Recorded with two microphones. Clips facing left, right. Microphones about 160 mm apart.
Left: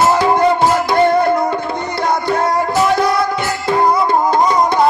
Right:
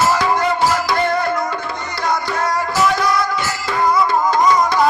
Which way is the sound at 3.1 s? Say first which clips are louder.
Left 3 dB; 60° left (ahead or behind).